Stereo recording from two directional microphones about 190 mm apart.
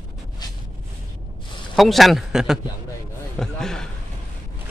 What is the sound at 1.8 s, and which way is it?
Speech, centre (ahead or behind).